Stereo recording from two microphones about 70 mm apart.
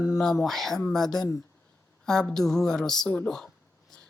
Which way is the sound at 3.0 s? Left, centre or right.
Centre.